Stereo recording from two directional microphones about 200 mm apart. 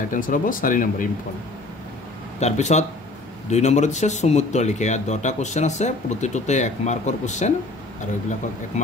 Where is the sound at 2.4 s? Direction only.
35° left (ahead or behind).